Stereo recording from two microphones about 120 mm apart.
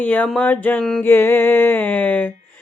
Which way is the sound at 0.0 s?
15° left (ahead or behind).